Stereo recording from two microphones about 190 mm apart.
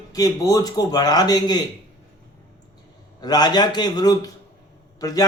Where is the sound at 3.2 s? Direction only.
20° left (ahead or behind).